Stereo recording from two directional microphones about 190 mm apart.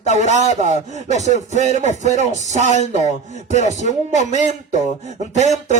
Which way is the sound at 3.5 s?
40° right (ahead or behind).